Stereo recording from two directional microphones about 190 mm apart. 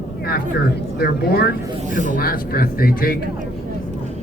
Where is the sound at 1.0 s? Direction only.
55° left (ahead or behind).